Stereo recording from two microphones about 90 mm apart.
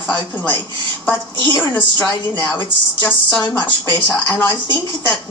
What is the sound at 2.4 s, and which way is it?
Speech, 25° left (ahead or behind).